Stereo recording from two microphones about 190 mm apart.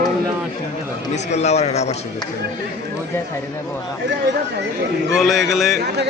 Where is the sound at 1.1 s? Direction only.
35° left (ahead or behind).